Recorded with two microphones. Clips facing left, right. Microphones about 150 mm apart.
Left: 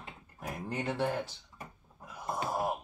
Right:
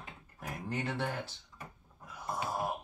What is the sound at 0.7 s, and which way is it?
Speech, 15° left (ahead or behind).